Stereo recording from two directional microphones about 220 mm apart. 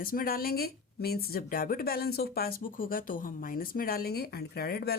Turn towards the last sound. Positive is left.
turn(degrees=45)  # may be behind; listen again after turning